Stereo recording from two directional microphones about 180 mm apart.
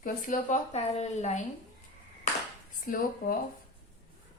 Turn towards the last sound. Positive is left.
turn(degrees=50)  # may be behind; listen again after turning